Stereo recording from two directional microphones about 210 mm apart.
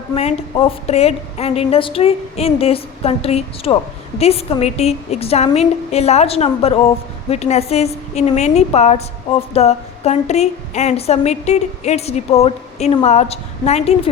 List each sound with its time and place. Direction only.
0.1 s a woman's voice: 30° left (ahead or behind)